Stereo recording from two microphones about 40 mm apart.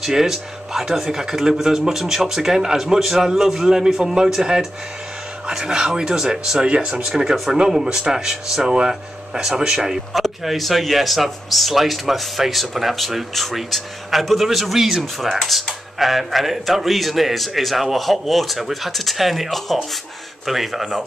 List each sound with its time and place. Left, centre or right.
0.0 s a man's voice: centre
6.6 s a man's voice: right
10.1 s speech: centre